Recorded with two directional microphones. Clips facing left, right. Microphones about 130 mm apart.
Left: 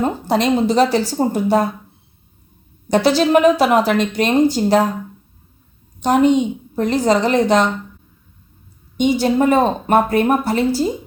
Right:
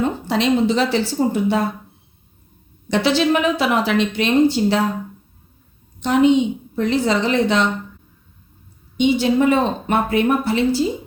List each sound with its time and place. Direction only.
0.0 s speech: 40° left (ahead or behind)
2.9 s a woman's voice: 40° left (ahead or behind)
6.0 s a woman's voice: 45° left (ahead or behind)
9.0 s a woman's voice: 45° left (ahead or behind)